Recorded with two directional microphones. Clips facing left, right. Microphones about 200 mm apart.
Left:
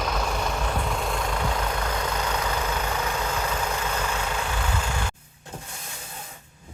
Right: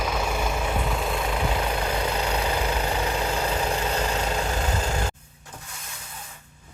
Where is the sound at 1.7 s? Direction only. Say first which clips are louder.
Right 2 dB; 30° right (ahead or behind).